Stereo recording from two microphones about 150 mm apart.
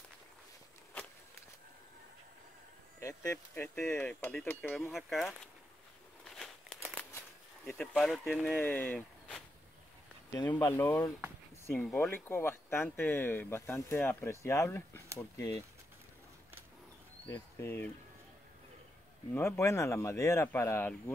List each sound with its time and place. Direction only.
3.0 s speech: 20° left (ahead or behind); by 5.5 s 5° left (ahead or behind)
6.2 s crumpling: centre (ahead or behind)
7.6 s speech: 5° left (ahead or behind)
10.5 s speech: 15° left (ahead or behind)
17.3 s speech: 15° left (ahead or behind)
19.3 s speech: 15° left (ahead or behind)